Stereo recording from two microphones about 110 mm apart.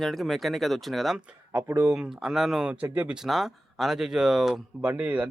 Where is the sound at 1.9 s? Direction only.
5° right (ahead or behind).